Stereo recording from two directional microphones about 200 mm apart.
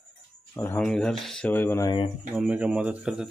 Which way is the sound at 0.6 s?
5° left (ahead or behind).